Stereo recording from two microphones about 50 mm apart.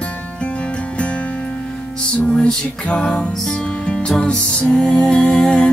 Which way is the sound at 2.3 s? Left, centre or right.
Centre.